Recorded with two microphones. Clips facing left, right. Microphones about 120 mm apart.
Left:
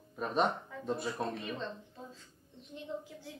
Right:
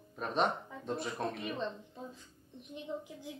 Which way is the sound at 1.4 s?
15° right (ahead or behind).